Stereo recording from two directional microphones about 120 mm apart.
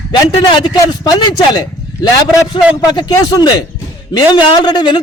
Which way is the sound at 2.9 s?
30° left (ahead or behind).